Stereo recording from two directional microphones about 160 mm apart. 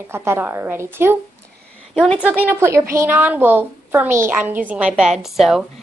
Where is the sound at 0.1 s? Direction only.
15° right (ahead or behind).